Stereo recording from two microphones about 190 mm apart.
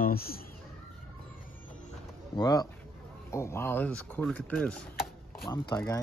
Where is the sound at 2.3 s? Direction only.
20° left (ahead or behind); by 4.8 s 5° left (ahead or behind).